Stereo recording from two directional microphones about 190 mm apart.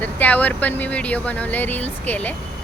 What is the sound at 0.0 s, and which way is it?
Speech, 10° left (ahead or behind).